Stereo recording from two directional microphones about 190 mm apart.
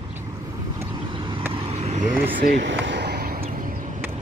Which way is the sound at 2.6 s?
70° right (ahead or behind).